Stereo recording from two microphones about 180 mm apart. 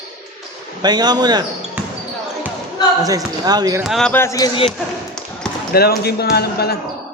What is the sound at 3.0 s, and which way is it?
Speech, 20° right (ahead or behind).